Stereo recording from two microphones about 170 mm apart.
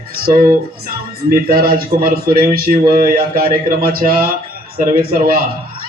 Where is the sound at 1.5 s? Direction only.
65° right (ahead or behind).